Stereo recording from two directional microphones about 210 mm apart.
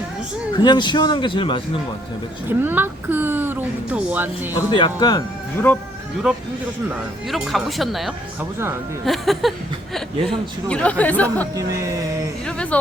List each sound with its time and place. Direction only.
0.5 s a man's voice: 20° left (ahead or behind)
2.5 s speech: 10° right (ahead or behind)
4.5 s a man's voice: 20° left (ahead or behind)
6.3 s a sound: 5° right (ahead or behind)
10.7 s speech: 5° left (ahead or behind)
12.5 s a sound: 5° left (ahead or behind)